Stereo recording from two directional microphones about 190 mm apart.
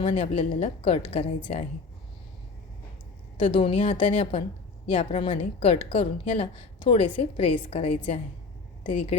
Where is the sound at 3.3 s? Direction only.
30° left (ahead or behind).